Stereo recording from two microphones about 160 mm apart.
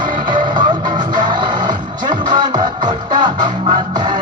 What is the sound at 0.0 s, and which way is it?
Music, 30° right (ahead or behind).